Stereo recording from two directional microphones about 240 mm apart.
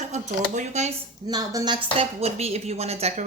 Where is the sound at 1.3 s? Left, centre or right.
Centre.